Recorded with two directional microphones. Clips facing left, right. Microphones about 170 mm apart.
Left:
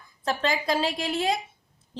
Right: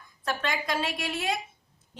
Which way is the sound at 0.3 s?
30° left (ahead or behind).